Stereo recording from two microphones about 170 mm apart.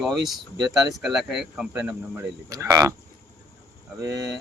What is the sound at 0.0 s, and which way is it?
Speech, centre (ahead or behind).